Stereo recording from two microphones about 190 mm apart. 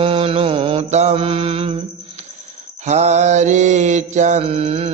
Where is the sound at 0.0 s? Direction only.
30° right (ahead or behind).